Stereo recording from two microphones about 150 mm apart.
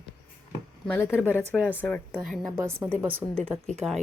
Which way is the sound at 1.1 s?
10° right (ahead or behind).